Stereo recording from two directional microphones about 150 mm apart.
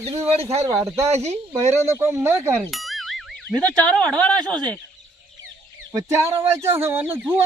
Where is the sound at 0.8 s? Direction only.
20° right (ahead or behind).